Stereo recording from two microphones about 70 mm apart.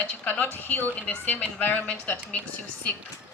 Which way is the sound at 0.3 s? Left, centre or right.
Left.